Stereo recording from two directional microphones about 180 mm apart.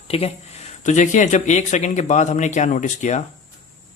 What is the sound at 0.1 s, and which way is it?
Speech, 35° left (ahead or behind).